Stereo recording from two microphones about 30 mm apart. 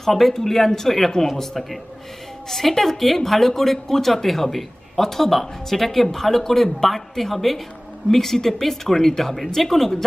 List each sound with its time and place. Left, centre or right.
0.0 s a man's voice: centre